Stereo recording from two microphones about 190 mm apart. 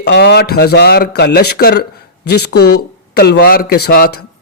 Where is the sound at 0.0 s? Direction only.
60° left (ahead or behind).